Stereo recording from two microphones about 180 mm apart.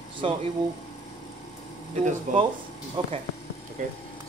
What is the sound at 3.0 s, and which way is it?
Speech, 30° right (ahead or behind).